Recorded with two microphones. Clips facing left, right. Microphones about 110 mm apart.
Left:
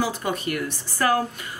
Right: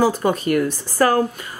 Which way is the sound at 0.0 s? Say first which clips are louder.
Right 8 dB; 40° right (ahead or behind).